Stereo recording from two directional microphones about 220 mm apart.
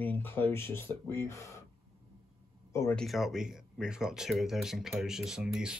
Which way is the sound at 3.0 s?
Centre (ahead or behind).